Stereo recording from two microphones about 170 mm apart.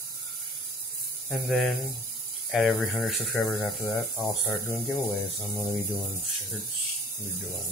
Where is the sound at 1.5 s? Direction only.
Centre (ahead or behind).